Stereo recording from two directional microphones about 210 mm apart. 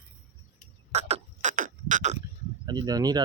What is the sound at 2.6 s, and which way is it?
Speech, 20° right (ahead or behind).